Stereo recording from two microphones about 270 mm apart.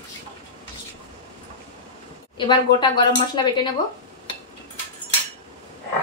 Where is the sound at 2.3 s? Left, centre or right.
Centre.